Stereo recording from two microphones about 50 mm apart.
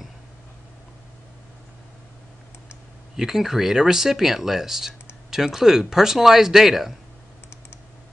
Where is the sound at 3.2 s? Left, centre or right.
Centre.